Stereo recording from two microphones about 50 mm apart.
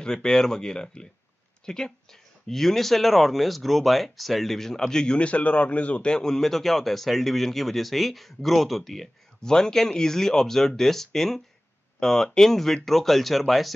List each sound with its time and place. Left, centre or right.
0.0 s speech: centre
9.4 s speech: centre